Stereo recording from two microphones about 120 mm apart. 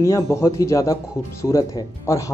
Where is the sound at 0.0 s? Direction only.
25° left (ahead or behind).